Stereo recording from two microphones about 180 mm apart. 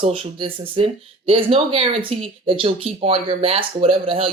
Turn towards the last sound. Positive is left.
turn(degrees=-30)  # may be behind; listen again after turning